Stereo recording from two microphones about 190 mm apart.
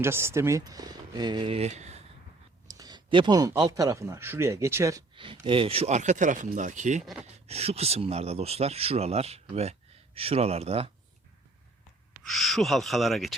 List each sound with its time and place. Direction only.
0.0 s speech: 15° right (ahead or behind); by 2.0 s 35° right (ahead or behind)
2.6 s speech: 20° right (ahead or behind); by 7.0 s 40° right (ahead or behind)
7.0 s speech: centre (ahead or behind)
7.3 s speech: 35° right (ahead or behind)
12.2 s speech: centre (ahead or behind)